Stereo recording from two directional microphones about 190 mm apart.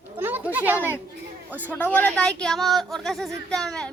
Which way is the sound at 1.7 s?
10° left (ahead or behind).